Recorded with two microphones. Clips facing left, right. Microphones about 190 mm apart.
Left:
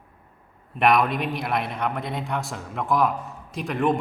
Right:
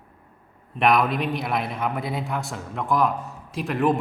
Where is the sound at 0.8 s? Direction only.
Centre (ahead or behind).